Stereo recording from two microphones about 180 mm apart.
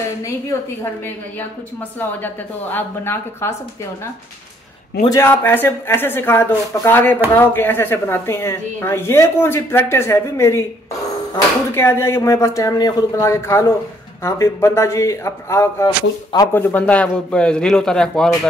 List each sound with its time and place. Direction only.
2.0 s a woman's voice: 10° left (ahead or behind)
5.0 s a woman's voice: 15° left (ahead or behind)
16.5 s a man's voice: 10° left (ahead or behind)